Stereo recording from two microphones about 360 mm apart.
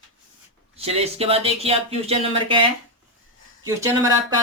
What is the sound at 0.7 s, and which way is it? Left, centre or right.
Speech, centre.